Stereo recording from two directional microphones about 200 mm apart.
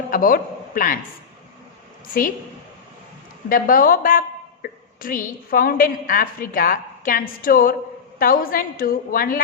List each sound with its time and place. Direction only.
0.1 s a man's voice: 45° left (ahead or behind)
3.5 s a woman's voice: 45° left (ahead or behind)